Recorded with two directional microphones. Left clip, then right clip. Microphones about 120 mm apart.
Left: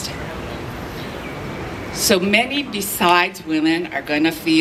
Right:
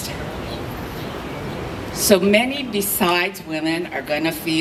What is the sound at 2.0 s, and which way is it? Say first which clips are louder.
A woman's voice: right 1 dB; 20° left (ahead or behind).